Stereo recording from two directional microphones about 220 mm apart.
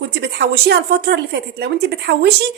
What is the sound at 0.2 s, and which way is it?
A woman's voice, 50° right (ahead or behind).